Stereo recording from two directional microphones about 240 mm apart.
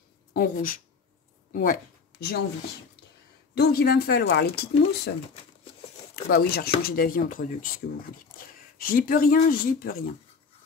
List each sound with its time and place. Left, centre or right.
0.3 s speech: left
3.5 s speech: left
6.2 s speech: left
8.7 s speech: left